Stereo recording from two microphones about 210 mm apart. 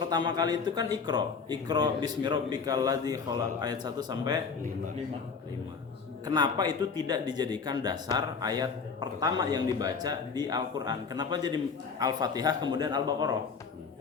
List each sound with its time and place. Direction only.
0.1 s speech: 20° right (ahead or behind)
6.2 s speech: 20° right (ahead or behind)